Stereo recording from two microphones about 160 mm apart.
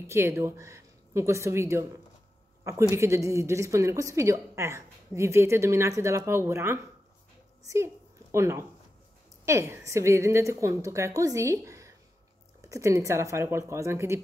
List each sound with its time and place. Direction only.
0.0 s a woman's voice: 15° right (ahead or behind)
7.6 s a sound: 20° right (ahead or behind)
9.5 s a woman's voice: 15° right (ahead or behind)